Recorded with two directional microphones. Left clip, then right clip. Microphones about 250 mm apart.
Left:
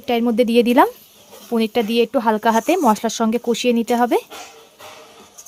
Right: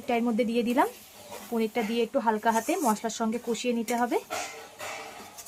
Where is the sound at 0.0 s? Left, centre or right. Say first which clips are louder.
Left 9 dB; left.